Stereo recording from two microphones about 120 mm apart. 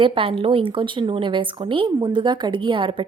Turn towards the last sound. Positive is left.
turn(degrees=-45)  # may be behind; listen again after turning